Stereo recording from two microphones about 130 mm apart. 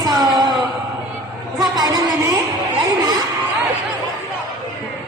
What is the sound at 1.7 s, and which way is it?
Music, 30° right (ahead or behind).